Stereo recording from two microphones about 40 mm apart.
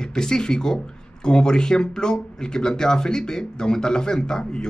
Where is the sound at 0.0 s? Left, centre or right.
Centre.